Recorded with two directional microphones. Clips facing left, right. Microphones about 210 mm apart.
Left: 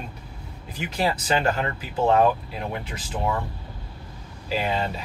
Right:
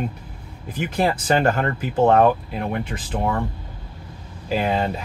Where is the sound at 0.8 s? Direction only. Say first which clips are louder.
Right 4 dB; 50° right (ahead or behind).